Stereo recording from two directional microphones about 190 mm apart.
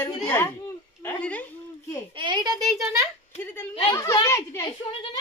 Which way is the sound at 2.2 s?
25° right (ahead or behind).